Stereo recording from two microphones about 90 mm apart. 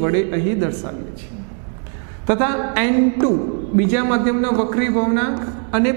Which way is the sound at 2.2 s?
20° right (ahead or behind).